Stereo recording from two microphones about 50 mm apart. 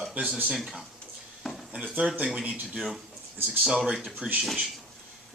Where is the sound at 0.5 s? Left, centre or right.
Centre.